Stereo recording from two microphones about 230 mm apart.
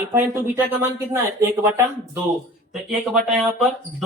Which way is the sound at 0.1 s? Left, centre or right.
Centre.